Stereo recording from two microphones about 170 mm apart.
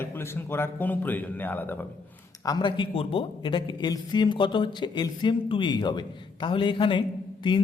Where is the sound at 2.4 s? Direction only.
25° left (ahead or behind).